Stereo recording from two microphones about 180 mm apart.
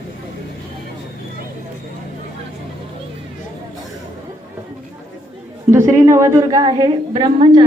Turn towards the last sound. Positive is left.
turn(degrees=-25)  # may be behind; listen again after turning